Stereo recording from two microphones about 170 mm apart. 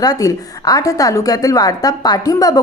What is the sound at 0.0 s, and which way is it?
A woman's voice, 20° left (ahead or behind).